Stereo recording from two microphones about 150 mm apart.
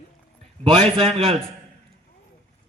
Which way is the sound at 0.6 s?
35° right (ahead or behind).